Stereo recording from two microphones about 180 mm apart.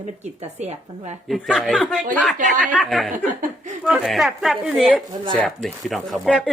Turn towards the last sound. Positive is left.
turn(degrees=5)  # may be behind; listen again after turning